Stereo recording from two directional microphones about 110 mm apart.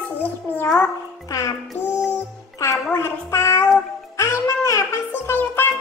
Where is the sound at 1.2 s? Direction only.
30° left (ahead or behind).